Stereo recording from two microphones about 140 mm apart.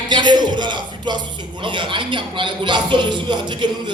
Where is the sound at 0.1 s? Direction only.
30° right (ahead or behind).